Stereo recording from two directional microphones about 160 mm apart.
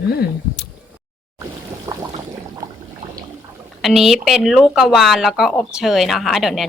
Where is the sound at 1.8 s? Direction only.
20° right (ahead or behind).